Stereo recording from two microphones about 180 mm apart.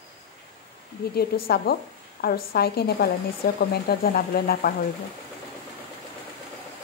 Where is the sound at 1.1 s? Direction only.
60° left (ahead or behind).